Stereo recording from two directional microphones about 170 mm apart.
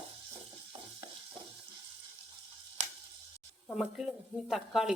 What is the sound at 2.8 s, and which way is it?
Sizzle, 45° right (ahead or behind).